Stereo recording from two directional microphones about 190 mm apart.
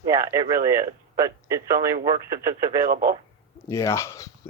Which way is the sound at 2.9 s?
50° right (ahead or behind).